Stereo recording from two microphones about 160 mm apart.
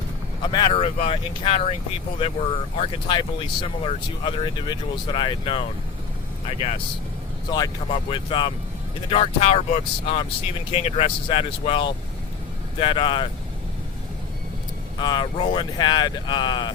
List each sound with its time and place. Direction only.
0.4 s speech: 30° left (ahead or behind)
0.8 s speech: 40° left (ahead or behind)
2.7 s speech: 35° left (ahead or behind)
7.5 s speech: 30° left (ahead or behind)
14.9 s speech: 30° left (ahead or behind)